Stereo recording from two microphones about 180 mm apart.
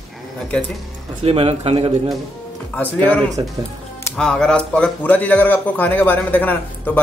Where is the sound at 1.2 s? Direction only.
35° right (ahead or behind).